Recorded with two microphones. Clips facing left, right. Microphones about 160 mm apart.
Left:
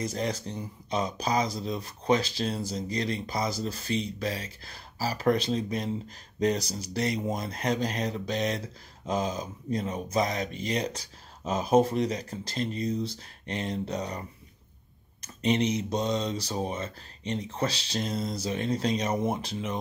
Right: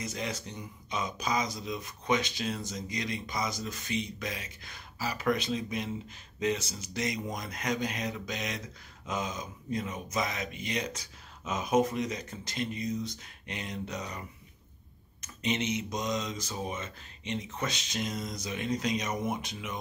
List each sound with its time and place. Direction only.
0.0 s speech: 35° left (ahead or behind)
15.2 s speech: 35° left (ahead or behind)